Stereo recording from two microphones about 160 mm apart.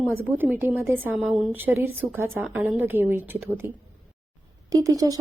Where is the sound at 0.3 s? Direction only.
10° right (ahead or behind).